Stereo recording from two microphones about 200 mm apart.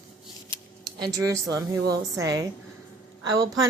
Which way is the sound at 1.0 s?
15° right (ahead or behind).